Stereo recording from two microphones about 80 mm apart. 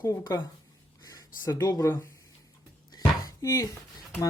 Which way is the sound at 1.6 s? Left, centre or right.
Left.